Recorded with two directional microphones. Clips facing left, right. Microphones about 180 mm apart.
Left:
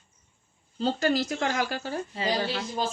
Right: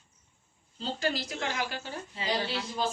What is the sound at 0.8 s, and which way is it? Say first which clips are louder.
Speech: left 7 dB; 45° left (ahead or behind).